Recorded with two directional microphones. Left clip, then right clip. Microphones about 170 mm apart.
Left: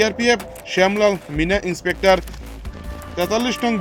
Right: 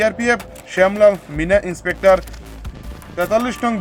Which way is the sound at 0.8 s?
30° left (ahead or behind).